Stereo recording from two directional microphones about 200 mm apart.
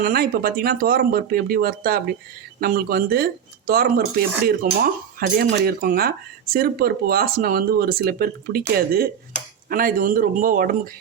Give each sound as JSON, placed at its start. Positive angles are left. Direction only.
{"t": 0.0, "sound": "speech", "side_deg": -50}